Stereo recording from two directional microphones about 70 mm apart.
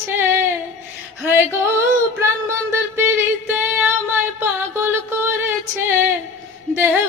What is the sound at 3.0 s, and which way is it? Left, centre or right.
Music, right.